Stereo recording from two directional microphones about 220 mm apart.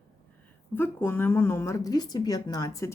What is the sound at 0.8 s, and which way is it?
Speech, 10° left (ahead or behind).